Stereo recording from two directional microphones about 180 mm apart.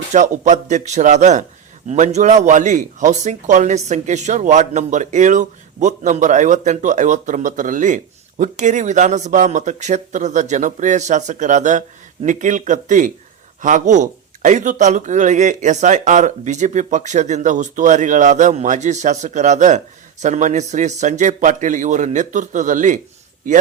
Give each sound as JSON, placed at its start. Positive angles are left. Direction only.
{"t": 0.1, "sound": "a man's voice", "side_deg": -40}